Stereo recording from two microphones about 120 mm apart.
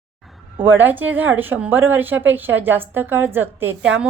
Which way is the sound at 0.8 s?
15° right (ahead or behind).